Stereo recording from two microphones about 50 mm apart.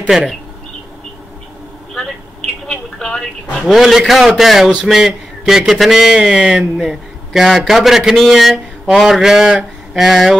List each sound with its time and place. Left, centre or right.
0.1 s a man's voice: centre
2.7 s a sound: centre
3.6 s a man's voice: centre